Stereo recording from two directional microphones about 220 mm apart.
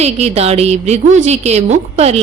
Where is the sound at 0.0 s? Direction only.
30° right (ahead or behind).